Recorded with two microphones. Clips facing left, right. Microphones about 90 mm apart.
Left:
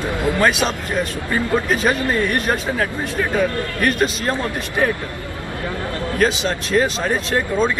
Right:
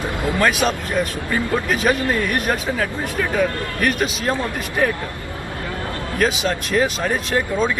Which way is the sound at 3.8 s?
5° right (ahead or behind).